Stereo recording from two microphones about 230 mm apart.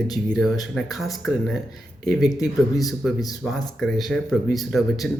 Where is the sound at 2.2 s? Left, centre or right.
Centre.